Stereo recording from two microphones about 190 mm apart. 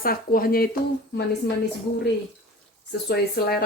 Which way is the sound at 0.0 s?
50° left (ahead or behind).